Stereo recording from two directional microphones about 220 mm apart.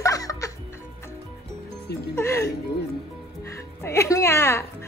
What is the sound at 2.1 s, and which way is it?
Speech, 10° left (ahead or behind).